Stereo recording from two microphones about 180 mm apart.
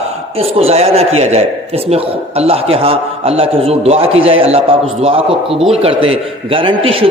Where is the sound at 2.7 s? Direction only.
30° right (ahead or behind).